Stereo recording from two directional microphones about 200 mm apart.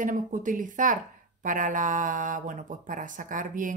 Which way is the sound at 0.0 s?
40° right (ahead or behind).